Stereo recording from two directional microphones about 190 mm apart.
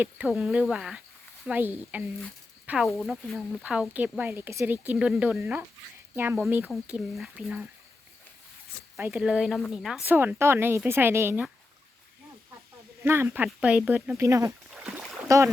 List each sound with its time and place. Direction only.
0.0 s speech: 5° right (ahead or behind)
9.0 s speech: 10° right (ahead or behind)
13.0 s speech: 15° right (ahead or behind)
14.7 s splash: centre (ahead or behind)